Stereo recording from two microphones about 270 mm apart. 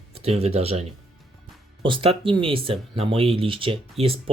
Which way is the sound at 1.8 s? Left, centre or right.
Centre.